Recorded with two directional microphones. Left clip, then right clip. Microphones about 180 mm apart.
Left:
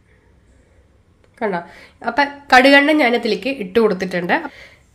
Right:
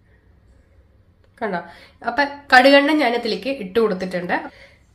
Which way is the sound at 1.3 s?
30° left (ahead or behind).